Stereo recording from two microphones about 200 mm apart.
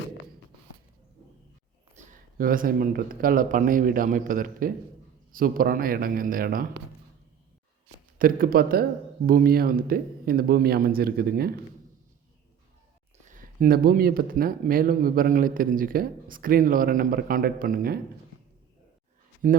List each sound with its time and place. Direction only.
2.0 s speech: 45° right (ahead or behind)
8.2 s speech: 45° right (ahead or behind)
13.3 s speech: 45° right (ahead or behind)
19.4 s speech: 40° right (ahead or behind)